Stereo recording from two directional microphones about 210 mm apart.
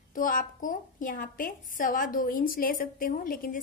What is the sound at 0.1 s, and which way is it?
A woman's voice, 40° left (ahead or behind).